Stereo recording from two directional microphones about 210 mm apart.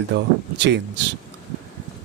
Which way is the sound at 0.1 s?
55° right (ahead or behind).